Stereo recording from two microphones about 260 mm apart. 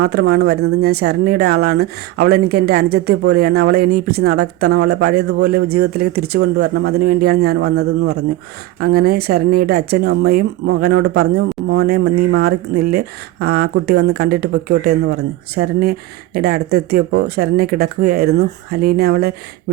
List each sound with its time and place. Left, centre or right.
0.0 s speech: right